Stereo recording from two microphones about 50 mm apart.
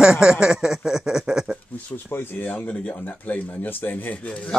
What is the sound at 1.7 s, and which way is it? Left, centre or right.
Speech, left.